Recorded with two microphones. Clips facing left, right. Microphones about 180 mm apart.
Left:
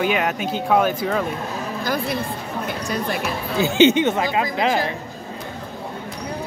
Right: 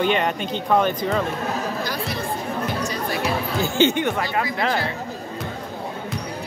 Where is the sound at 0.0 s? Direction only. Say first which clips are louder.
Even; 5° left (ahead or behind).